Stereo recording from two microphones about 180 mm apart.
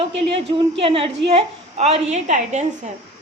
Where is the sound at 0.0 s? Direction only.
30° right (ahead or behind).